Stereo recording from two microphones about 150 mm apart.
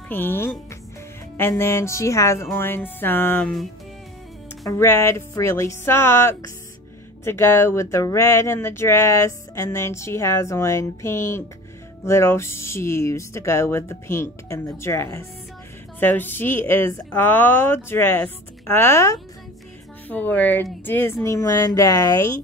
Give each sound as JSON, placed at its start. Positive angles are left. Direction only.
{"t": 0.1, "sound": "a woman's voice", "side_deg": 15}
{"t": 4.6, "sound": "a woman's voice", "side_deg": 20}